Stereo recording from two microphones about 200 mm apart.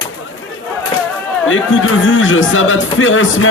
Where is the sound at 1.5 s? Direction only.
75° left (ahead or behind).